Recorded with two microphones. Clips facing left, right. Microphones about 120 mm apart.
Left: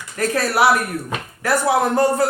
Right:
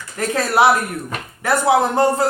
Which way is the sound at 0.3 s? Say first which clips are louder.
Right 2 dB; 20° right (ahead or behind).